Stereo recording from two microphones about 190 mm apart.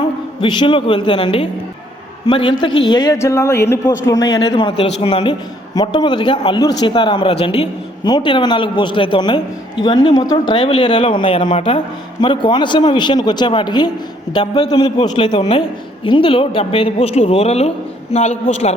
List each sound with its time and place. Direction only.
0.4 s a man's voice: 25° left (ahead or behind)